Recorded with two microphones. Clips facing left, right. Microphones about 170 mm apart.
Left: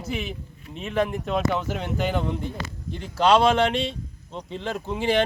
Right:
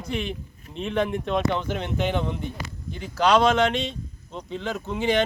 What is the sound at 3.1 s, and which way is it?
Speech, 30° left (ahead or behind).